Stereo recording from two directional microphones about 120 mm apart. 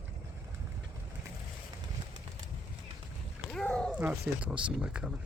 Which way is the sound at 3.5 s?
10° left (ahead or behind).